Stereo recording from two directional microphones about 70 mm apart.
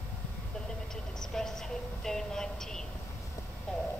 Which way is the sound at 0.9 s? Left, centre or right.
Centre.